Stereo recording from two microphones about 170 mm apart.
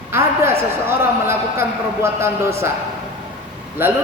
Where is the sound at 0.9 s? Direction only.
15° right (ahead or behind).